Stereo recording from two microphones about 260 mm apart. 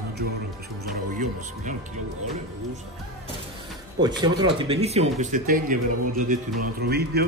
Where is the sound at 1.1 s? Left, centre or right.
Right.